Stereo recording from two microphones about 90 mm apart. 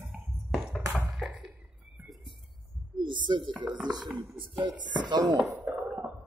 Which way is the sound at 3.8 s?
55° right (ahead or behind).